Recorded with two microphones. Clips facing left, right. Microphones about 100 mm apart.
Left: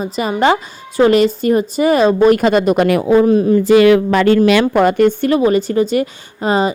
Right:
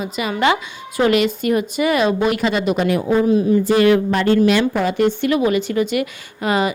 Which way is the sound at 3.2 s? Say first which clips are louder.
Left 4 dB; 50° left (ahead or behind).